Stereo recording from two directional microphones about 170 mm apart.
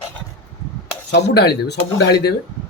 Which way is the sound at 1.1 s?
75° left (ahead or behind).